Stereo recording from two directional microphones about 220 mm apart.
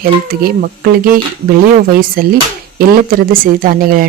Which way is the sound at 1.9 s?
40° right (ahead or behind).